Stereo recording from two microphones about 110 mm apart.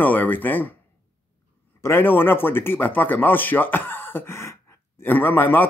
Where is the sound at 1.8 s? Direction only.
20° left (ahead or behind).